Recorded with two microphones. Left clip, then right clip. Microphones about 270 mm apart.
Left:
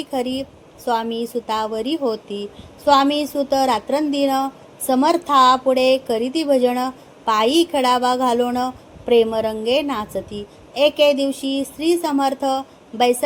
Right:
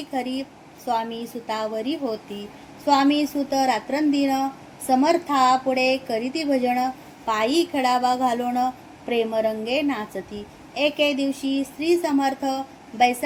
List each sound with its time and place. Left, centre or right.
0.1 s a woman's voice: left